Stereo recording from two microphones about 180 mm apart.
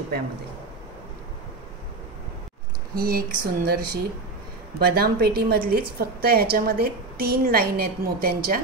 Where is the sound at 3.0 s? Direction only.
55° right (ahead or behind).